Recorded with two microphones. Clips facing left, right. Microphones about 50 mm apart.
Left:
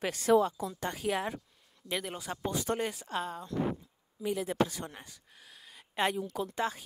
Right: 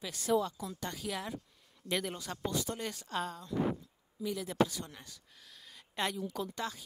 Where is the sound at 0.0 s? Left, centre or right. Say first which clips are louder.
Left 8 dB; left.